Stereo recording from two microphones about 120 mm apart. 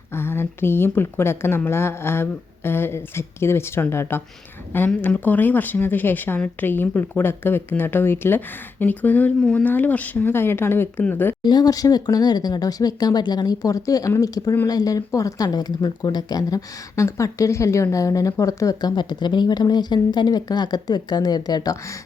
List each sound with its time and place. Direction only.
0.1 s a woman's voice: 20° left (ahead or behind)
11.4 s a woman's voice: 35° left (ahead or behind)